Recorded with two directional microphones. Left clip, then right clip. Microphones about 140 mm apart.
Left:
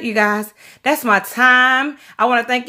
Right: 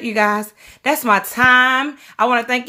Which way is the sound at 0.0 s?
10° left (ahead or behind).